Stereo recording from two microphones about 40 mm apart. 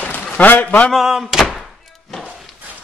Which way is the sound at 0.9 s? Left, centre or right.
Centre.